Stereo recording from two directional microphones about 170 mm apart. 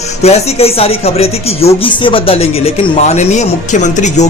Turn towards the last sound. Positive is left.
turn(degrees=45)  # may be behind; listen again after turning